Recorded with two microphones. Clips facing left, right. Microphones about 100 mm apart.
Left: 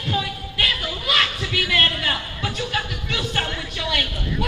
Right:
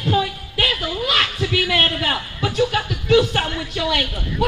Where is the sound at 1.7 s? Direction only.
60° right (ahead or behind).